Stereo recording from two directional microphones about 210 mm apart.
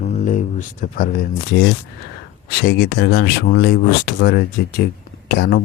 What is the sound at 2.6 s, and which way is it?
Speech, 50° left (ahead or behind).